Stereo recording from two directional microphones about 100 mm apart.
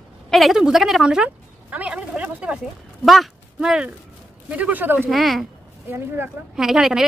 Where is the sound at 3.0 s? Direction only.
Centre (ahead or behind); by 5.1 s 20° right (ahead or behind).